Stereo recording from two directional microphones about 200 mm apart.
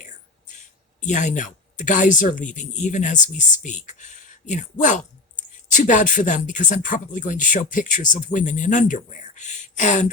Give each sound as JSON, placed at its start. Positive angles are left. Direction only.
{"t": 1.0, "sound": "speech", "side_deg": 35}